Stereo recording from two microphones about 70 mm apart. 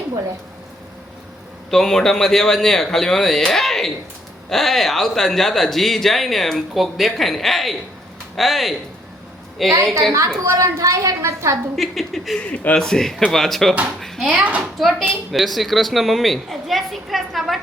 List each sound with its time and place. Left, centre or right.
1.7 s speech: centre
10.1 s a woman's voice: right
11.8 s speech: centre
12.4 s a man's voice: centre
14.3 s speech: centre
14.6 s speech: centre